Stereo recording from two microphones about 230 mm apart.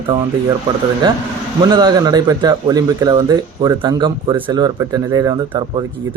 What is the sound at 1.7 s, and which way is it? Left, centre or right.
Speech, centre.